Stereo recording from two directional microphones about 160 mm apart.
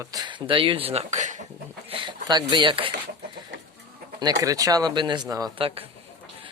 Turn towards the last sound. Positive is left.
turn(degrees=-25)  # may be behind; listen again after turning